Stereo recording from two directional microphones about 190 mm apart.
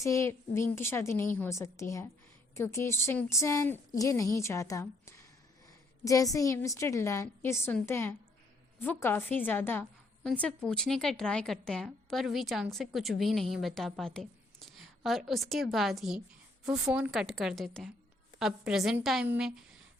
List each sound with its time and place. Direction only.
0.0 s a woman's voice: 15° left (ahead or behind)
6.3 s a woman's voice: 15° left (ahead or behind); by 19.5 s 5° right (ahead or behind)